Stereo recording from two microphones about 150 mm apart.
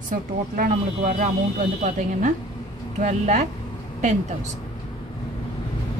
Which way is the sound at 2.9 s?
50° right (ahead or behind).